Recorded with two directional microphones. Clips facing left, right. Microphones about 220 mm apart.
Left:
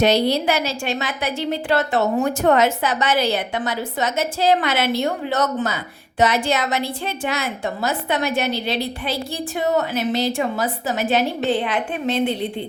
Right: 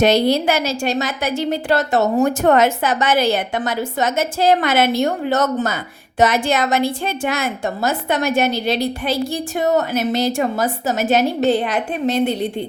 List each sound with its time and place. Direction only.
0.0 s a woman's voice: 50° right (ahead or behind)